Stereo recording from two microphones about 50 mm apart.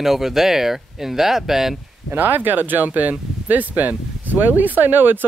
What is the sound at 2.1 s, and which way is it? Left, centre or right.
Speech, right.